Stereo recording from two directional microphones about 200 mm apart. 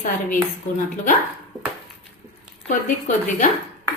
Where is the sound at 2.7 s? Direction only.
40° left (ahead or behind).